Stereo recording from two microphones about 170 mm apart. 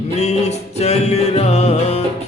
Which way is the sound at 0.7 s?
40° left (ahead or behind).